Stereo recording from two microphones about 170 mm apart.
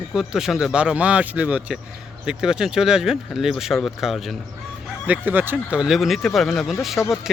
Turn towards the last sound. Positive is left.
turn(degrees=0)  # may be behind; listen again after turning